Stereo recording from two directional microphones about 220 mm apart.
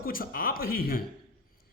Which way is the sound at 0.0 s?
40° left (ahead or behind).